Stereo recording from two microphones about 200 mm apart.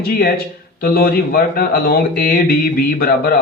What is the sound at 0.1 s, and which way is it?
A man's voice, 50° left (ahead or behind).